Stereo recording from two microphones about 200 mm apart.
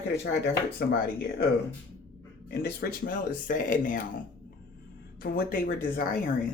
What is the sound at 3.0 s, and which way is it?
Speech, 45° left (ahead or behind).